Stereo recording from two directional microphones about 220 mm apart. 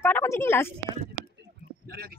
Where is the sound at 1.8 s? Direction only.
45° right (ahead or behind).